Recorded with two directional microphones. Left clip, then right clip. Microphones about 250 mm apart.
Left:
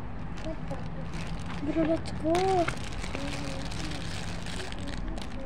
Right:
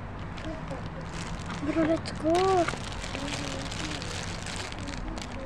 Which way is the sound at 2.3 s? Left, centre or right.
Centre.